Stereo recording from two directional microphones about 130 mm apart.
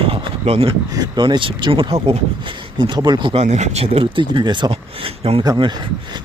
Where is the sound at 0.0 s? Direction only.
45° right (ahead or behind).